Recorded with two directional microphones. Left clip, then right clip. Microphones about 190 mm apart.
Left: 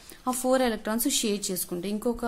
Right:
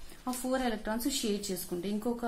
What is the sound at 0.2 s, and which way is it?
Speech, 40° left (ahead or behind).